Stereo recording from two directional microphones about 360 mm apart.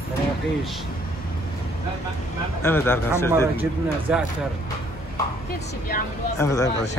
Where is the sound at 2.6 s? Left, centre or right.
Centre.